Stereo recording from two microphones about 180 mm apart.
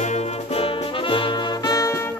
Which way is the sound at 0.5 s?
30° left (ahead or behind).